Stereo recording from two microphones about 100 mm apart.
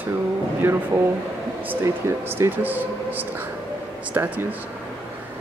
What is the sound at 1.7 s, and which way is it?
Speech, 20° right (ahead or behind).